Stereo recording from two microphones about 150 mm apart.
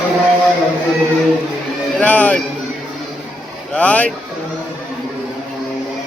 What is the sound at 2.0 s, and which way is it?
Music, 10° left (ahead or behind).